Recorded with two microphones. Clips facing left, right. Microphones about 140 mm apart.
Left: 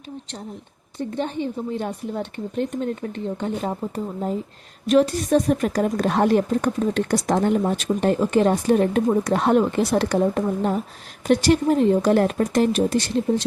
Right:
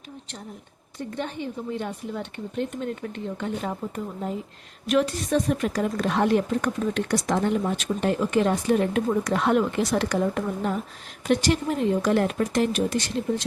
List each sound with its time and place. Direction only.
0.9 s a woman's voice: 25° left (ahead or behind)